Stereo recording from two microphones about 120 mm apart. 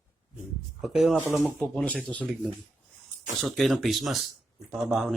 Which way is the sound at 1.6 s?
10° left (ahead or behind).